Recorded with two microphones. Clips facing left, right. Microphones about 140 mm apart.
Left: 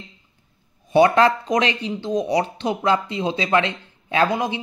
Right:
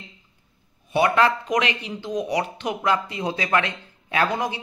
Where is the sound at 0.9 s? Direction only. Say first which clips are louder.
Left 4 dB; 30° left (ahead or behind).